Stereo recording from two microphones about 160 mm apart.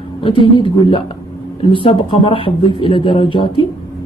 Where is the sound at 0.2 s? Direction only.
30° left (ahead or behind).